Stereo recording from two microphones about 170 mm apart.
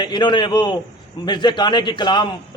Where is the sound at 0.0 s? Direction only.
25° left (ahead or behind).